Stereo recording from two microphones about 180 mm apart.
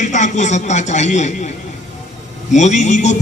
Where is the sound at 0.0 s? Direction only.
40° left (ahead or behind).